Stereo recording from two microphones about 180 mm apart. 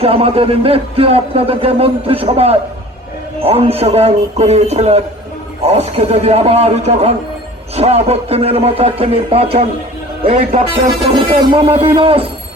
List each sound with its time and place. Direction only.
0.0 s a man's voice: 30° right (ahead or behind)